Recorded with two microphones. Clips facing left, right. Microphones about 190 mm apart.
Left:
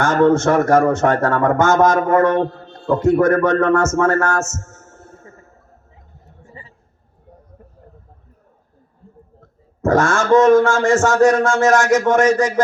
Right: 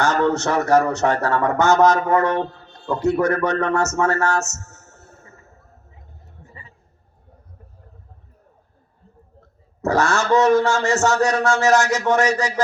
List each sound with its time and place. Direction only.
0.0 s speech: 50° left (ahead or behind)
6.5 s a sound: 30° left (ahead or behind)
9.4 s speech: 50° left (ahead or behind)